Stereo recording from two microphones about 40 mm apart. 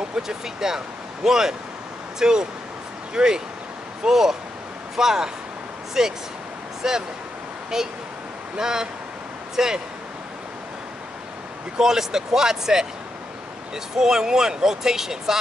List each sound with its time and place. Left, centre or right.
0.1 s speech: centre
11.8 s speech: centre
13.9 s speech: centre